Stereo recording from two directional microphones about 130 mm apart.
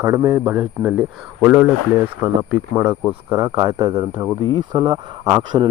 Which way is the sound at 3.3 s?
30° right (ahead or behind).